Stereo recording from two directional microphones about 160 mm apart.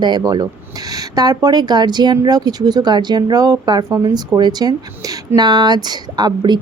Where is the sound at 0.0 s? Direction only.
25° right (ahead or behind).